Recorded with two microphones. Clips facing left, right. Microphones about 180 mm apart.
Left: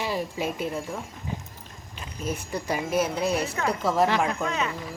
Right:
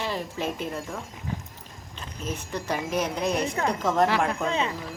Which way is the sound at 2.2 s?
10° left (ahead or behind).